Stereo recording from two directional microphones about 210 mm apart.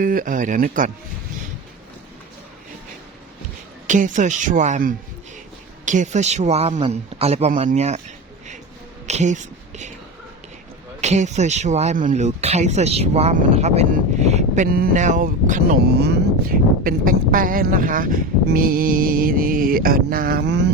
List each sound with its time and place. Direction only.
0.0 s speech: 40° right (ahead or behind)
3.8 s speech: 35° right (ahead or behind)
9.0 s a sound: 35° right (ahead or behind)
11.0 s speech: 35° right (ahead or behind); by 20.7 s 50° right (ahead or behind)